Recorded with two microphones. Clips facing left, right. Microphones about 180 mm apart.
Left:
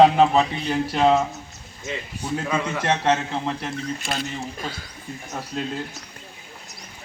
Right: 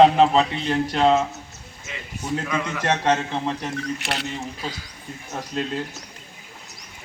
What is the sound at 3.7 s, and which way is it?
Speech, 70° right (ahead or behind).